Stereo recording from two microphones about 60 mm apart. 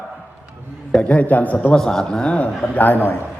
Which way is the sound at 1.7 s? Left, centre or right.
Centre.